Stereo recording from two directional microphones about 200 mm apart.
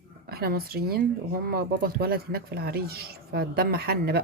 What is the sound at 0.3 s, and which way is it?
Speech, 50° right (ahead or behind).